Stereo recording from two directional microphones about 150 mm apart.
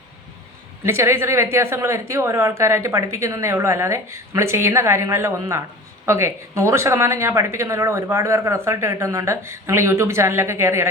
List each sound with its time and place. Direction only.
0.9 s speech: 15° right (ahead or behind)